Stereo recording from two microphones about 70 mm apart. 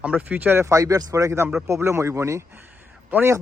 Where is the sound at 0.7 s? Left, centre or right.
Right.